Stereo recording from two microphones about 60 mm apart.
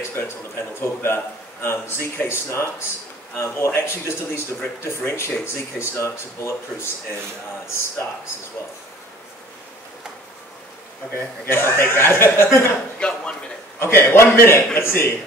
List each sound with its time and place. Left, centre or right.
0.1 s a man's voice: left
11.1 s speech: left
13.0 s speech: centre
13.7 s a man's voice: left